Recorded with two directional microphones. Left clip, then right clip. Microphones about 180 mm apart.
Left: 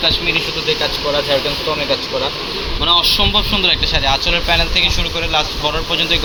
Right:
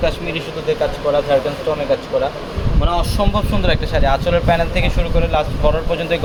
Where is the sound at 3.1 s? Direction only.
50° right (ahead or behind).